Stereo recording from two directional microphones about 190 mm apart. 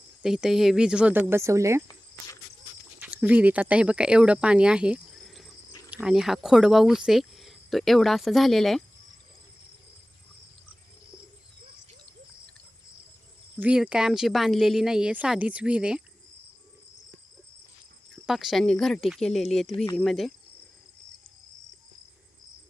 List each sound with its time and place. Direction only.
0.2 s speech: 5° right (ahead or behind)
1.9 s cricket: 20° left (ahead or behind)
3.2 s speech: 5° right (ahead or behind)
13.6 s speech: 5° right (ahead or behind)
18.1 s speech: centre (ahead or behind)
19.7 s speech: 30° left (ahead or behind)
20.0 s speech: centre (ahead or behind)